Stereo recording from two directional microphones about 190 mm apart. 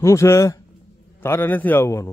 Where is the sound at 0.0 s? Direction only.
15° left (ahead or behind).